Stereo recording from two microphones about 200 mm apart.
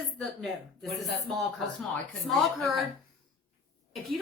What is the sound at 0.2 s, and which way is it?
A woman's voice, centre (ahead or behind).